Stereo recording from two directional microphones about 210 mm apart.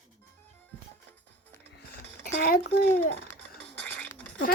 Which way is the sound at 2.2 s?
45° left (ahead or behind).